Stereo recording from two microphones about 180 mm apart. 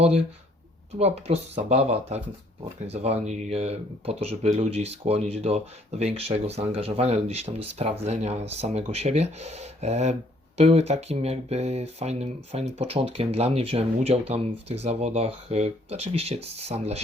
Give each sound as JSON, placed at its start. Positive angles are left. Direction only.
{"t": 0.9, "sound": "speech", "side_deg": -35}